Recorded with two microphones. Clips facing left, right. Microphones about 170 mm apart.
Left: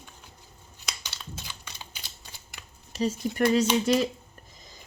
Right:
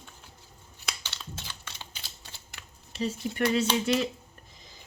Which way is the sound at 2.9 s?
40° left (ahead or behind).